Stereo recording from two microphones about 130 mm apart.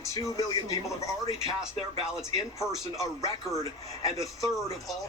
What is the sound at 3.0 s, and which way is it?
Speech, 25° left (ahead or behind).